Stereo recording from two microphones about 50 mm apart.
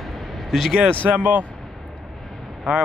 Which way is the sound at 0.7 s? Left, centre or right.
Right.